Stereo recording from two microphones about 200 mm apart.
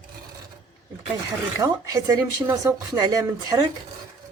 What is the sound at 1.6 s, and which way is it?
Speech, 15° right (ahead or behind).